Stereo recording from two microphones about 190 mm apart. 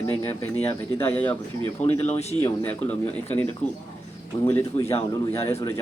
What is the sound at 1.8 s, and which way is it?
Speech, 35° left (ahead or behind).